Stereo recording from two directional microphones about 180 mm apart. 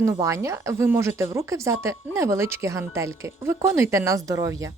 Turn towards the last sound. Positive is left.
turn(degrees=-20)  # may be behind; listen again after turning